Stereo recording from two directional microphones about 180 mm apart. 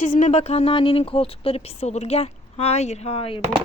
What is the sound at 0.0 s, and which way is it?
Speech, 40° left (ahead or behind).